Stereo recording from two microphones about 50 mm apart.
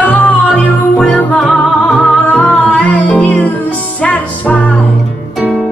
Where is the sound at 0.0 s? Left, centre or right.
Left.